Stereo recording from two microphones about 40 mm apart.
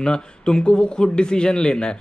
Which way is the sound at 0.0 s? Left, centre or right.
Left.